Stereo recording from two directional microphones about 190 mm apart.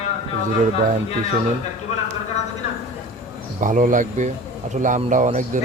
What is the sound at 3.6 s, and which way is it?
Speech, 45° right (ahead or behind).